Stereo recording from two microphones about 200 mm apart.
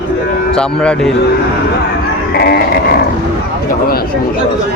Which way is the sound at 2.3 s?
50° left (ahead or behind).